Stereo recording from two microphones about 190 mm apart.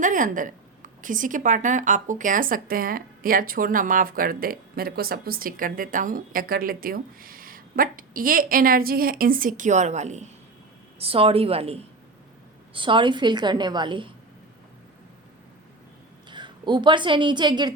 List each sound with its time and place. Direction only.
0.0 s a woman's voice: 45° right (ahead or behind); by 14.1 s 25° right (ahead or behind)
16.3 s a woman's voice: 25° right (ahead or behind)